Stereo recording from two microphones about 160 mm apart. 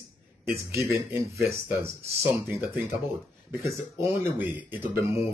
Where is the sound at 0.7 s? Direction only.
20° right (ahead or behind).